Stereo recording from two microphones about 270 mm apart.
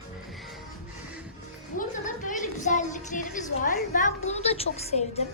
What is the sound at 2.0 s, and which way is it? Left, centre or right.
A woman's voice, left.